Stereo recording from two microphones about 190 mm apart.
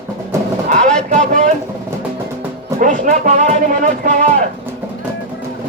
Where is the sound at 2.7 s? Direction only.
45° right (ahead or behind).